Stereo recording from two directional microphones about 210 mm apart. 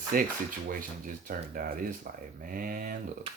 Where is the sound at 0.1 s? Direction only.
45° right (ahead or behind).